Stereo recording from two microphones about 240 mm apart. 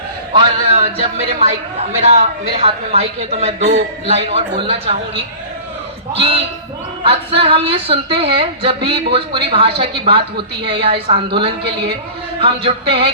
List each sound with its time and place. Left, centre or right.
0.3 s a woman's voice: right
12.4 s a woman's voice: right